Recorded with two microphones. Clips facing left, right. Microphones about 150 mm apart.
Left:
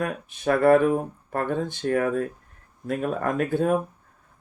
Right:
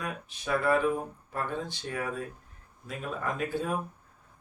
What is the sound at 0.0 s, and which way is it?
Speech, 55° left (ahead or behind).